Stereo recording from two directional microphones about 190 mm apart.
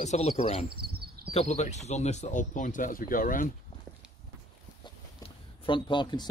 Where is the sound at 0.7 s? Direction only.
55° right (ahead or behind).